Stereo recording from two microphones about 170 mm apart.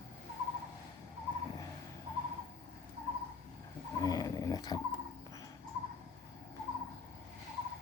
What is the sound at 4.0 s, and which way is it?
Dog, 20° left (ahead or behind).